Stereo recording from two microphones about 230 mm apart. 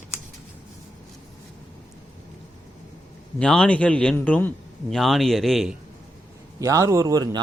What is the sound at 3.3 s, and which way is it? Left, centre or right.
A man's voice, centre.